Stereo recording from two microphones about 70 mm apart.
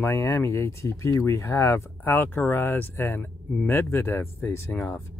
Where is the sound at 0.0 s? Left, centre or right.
Left.